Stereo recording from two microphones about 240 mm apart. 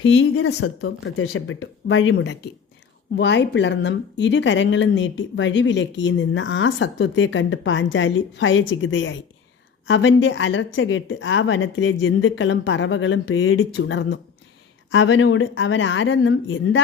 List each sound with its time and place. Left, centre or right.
0.0 s speech: left